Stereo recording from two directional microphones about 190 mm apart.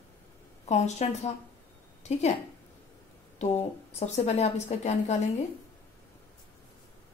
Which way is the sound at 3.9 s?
35° left (ahead or behind).